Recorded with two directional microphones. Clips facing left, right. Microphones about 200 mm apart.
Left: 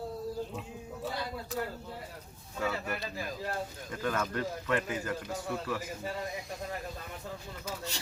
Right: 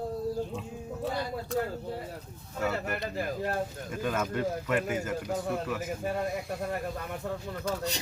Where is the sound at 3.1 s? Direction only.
55° right (ahead or behind).